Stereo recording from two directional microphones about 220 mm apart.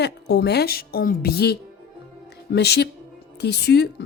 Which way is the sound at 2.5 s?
50° left (ahead or behind).